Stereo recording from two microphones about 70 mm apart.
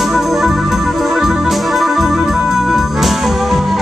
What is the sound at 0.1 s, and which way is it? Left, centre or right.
Organ, centre.